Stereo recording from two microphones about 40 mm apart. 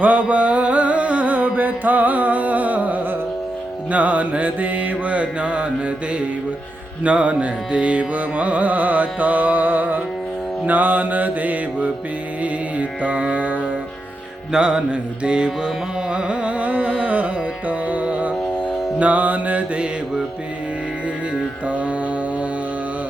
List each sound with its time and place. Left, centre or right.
0.0 s music: right
3.9 s carnatic music: right
10.7 s mantra: right
12.4 s music: right
14.5 s music: right
15.2 s carnatic music: right
21.7 s mantra: right